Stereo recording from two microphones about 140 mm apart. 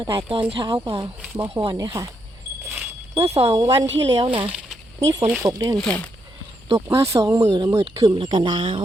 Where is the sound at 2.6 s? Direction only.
10° right (ahead or behind).